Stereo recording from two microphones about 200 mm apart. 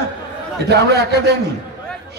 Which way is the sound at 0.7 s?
55° right (ahead or behind).